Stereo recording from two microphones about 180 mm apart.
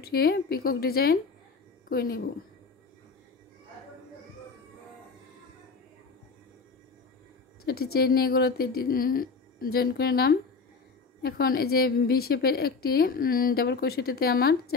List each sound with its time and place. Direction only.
0.0 s a woman's voice: 60° left (ahead or behind)
7.6 s a woman's voice: 60° left (ahead or behind)